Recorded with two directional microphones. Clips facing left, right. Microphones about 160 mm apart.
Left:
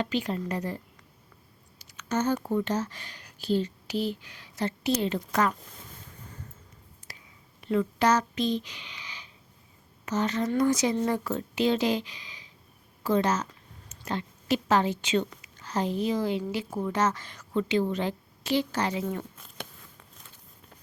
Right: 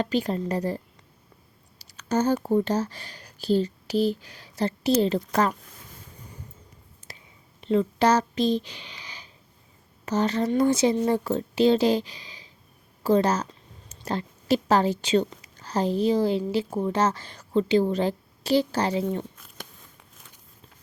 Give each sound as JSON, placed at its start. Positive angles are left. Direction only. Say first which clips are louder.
{"t": 0.0, "sound": "a woman's voice", "louder": "right 4 dB", "side_deg": -40}
{"t": 1.8, "sound": "speech", "louder": "right 4 dB", "side_deg": -35}
{"t": 7.1, "sound": "a sound", "louder": "right 3 dB", "side_deg": -25}
{"t": 7.6, "sound": "a woman's voice", "louder": "right 3 dB", "side_deg": -25}